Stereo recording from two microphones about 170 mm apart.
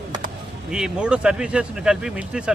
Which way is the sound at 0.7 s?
5° right (ahead or behind).